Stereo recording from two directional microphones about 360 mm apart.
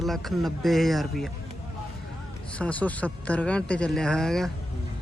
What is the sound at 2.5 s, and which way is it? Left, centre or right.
Speech, centre.